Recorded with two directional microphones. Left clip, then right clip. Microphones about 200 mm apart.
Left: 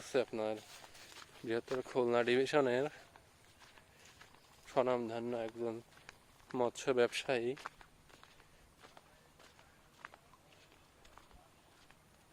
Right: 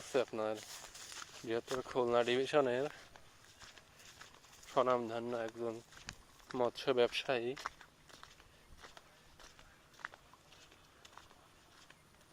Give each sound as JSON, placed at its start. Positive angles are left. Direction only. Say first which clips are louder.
{"t": 0.0, "sound": "speech", "louder": "even", "side_deg": 20}
{"t": 0.7, "sound": "a sound", "louder": "right 4 dB", "side_deg": -50}
{"t": 1.8, "sound": "speech", "louder": "even", "side_deg": 25}
{"t": 4.7, "sound": "speech", "louder": "right 1 dB", "side_deg": 25}